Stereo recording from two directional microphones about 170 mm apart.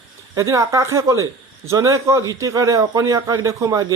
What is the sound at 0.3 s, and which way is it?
Speech, 20° right (ahead or behind).